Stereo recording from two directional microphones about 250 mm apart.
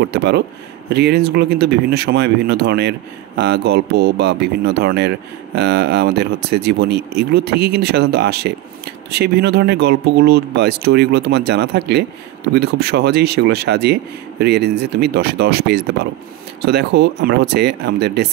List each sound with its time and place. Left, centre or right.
0.0 s speech: right